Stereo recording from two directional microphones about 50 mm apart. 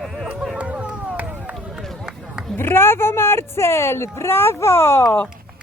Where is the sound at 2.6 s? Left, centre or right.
Left.